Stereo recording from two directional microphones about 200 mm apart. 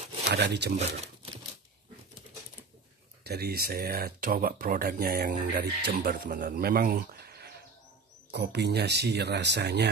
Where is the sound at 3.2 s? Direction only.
50° right (ahead or behind).